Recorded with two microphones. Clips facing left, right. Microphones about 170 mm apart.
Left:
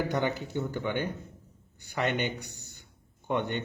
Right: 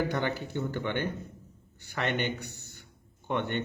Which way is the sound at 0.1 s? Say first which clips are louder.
Left 2 dB; 15° left (ahead or behind).